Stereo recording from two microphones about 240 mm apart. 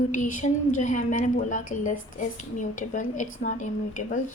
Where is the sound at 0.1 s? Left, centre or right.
Left.